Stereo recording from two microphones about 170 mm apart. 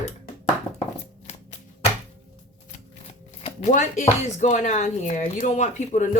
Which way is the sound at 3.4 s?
45° left (ahead or behind).